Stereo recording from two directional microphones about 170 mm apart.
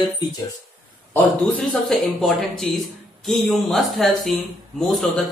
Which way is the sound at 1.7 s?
Centre (ahead or behind).